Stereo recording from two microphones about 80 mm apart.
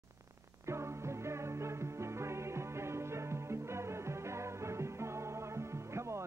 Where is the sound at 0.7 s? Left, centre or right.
Right.